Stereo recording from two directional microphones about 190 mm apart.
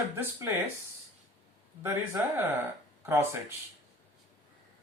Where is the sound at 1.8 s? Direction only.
10° right (ahead or behind).